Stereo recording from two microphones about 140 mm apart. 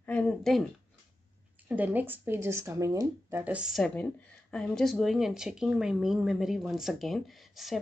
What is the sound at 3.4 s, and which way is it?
A woman's voice, 10° right (ahead or behind).